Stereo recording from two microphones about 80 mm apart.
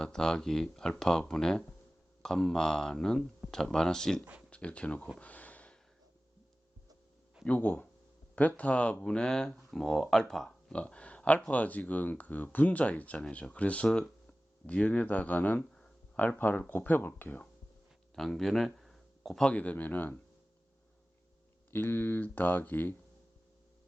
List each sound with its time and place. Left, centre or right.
0.0 s speech: centre
5.2 s a sound: centre
7.4 s speech: left
18.1 s a sound: centre
19.5 s speech: centre
21.7 s speech: left